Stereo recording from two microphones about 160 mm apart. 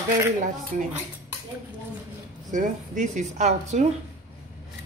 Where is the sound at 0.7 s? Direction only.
55° right (ahead or behind).